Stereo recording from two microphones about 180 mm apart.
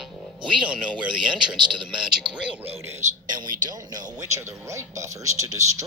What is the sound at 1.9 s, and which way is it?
A man's voice, 5° right (ahead or behind).